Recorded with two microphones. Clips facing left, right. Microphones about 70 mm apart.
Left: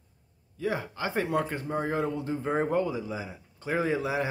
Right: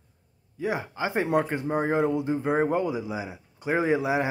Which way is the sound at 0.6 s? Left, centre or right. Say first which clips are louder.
Right 2 dB; centre.